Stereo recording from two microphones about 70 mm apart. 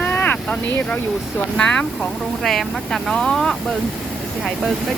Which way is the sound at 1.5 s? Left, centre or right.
Centre.